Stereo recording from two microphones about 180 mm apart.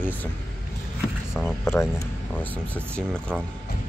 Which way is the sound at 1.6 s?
15° left (ahead or behind).